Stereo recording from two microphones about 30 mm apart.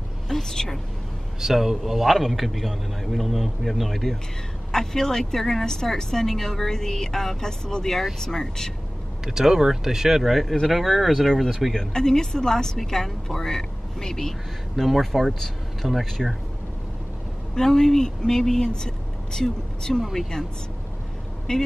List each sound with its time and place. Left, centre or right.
0.3 s a woman's voice: centre
1.4 s a man's voice: centre
4.7 s a woman's voice: centre
9.2 s a man's voice: centre
11.7 s a woman's voice: centre
14.8 s a man's voice: centre
15.8 s speech: centre
16.2 s a man's voice: centre
17.6 s a woman's voice: centre
20.0 s a man's voice: centre
21.5 s speech: left